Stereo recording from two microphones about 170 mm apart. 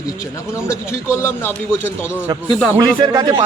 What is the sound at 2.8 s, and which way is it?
Speech, 25° right (ahead or behind).